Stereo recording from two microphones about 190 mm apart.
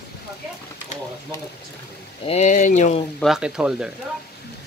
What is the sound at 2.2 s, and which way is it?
Speech, 35° left (ahead or behind).